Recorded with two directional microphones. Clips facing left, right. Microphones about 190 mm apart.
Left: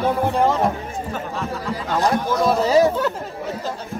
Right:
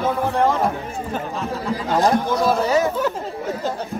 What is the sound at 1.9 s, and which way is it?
Speech, 35° right (ahead or behind).